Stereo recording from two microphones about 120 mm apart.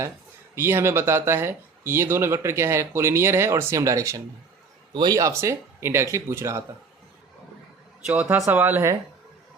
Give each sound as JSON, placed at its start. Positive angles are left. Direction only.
{"t": 0.5, "sound": "speech", "side_deg": -20}
{"t": 8.0, "sound": "speech", "side_deg": -10}